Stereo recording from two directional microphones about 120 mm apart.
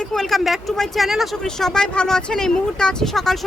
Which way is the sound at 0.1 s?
Centre (ahead or behind).